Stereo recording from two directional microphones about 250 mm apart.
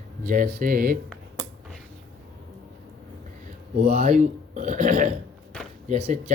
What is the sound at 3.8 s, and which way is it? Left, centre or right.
Speech, right.